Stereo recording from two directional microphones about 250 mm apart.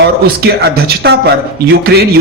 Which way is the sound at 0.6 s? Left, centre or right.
Right.